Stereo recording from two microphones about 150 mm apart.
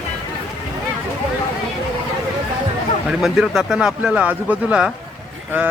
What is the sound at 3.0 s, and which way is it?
Speech, 5° right (ahead or behind).